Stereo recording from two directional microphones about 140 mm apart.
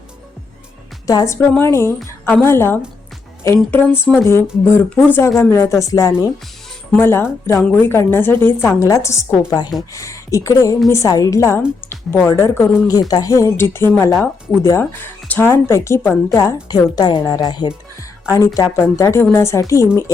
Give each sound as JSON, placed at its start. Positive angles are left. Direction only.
{"t": 1.0, "sound": "a woman's voice", "side_deg": 25}